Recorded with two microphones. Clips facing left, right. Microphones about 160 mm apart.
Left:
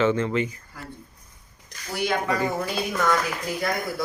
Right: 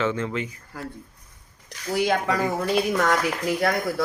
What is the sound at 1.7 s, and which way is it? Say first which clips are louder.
Speech: right 4 dB; 90° right.